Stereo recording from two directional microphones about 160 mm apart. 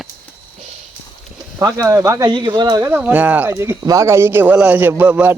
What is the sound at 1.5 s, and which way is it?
Speech, 20° right (ahead or behind).